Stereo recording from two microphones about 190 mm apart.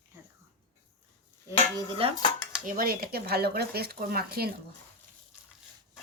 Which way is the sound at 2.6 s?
50° right (ahead or behind).